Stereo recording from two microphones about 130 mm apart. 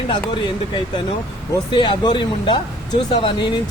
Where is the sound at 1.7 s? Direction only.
40° left (ahead or behind).